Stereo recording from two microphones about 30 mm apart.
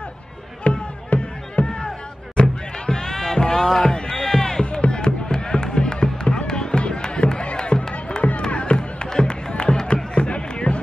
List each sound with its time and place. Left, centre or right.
0.7 s music: left
2.3 s music: left; by 3.9 s centre
3.9 s run: left
4.9 s music: left
6.2 s a sound: left
7.7 s music: left
8.2 s music: left
8.5 s music: left
8.7 s music: left
10.1 s a sound: left